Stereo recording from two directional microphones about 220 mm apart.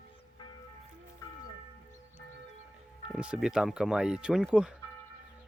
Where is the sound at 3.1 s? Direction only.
5° right (ahead or behind).